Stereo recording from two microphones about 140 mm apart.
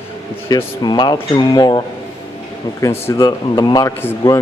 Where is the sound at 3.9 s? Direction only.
20° left (ahead or behind).